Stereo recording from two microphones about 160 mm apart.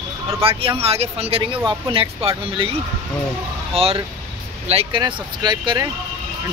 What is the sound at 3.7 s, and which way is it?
Speech, 40° right (ahead or behind).